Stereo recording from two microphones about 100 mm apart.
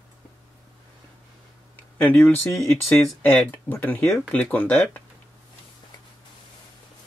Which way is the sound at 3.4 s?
20° left (ahead or behind).